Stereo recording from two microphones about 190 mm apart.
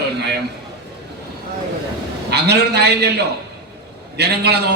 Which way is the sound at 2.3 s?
60° right (ahead or behind).